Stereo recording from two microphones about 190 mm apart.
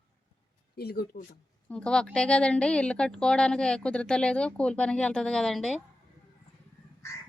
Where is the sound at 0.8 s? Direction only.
55° left (ahead or behind).